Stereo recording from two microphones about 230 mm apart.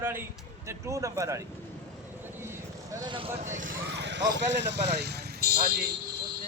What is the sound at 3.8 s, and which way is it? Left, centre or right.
Speech, right.